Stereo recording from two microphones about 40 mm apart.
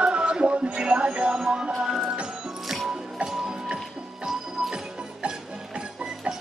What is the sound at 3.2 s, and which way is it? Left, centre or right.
Music, centre.